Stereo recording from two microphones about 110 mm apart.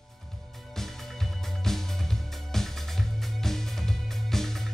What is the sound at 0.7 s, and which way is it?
Music, 5° left (ahead or behind).